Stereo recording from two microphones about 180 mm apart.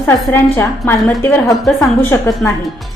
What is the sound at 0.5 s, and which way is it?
A woman's voice, 10° left (ahead or behind).